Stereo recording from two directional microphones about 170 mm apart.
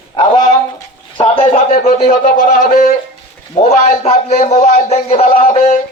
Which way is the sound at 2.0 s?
45° left (ahead or behind).